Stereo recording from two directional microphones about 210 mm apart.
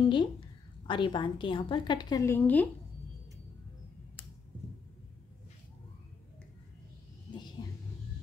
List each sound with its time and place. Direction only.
0.1 s a woman's voice: 25° left (ahead or behind)
7.6 s vehicle: 20° left (ahead or behind)